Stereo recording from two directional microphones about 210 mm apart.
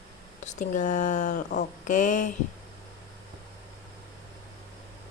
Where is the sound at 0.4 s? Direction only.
35° left (ahead or behind).